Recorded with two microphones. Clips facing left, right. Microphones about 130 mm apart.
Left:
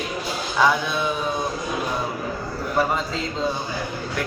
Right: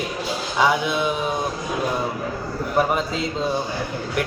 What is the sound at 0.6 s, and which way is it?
Speech, 15° right (ahead or behind).